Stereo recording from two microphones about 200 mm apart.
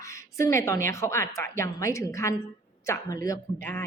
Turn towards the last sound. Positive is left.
turn(degrees=15)  # may be behind; listen again after turning